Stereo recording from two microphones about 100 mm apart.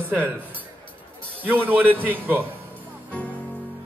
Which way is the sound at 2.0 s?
20° right (ahead or behind).